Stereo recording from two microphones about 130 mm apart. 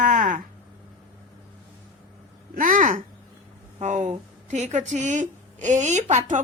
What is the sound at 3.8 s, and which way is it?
A woman's voice, 65° right (ahead or behind).